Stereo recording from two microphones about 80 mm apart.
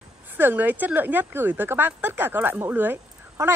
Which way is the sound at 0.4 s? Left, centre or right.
Right.